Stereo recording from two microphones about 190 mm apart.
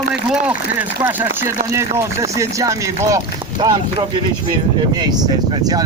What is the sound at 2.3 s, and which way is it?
Speech, 15° right (ahead or behind).